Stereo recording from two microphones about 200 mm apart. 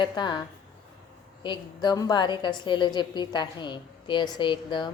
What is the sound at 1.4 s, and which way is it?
A woman's voice, 20° left (ahead or behind).